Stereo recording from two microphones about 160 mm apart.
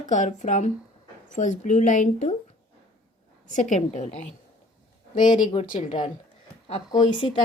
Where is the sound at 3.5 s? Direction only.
50° left (ahead or behind).